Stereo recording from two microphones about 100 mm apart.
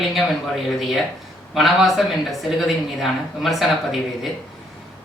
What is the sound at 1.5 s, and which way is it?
A woman's voice, centre (ahead or behind).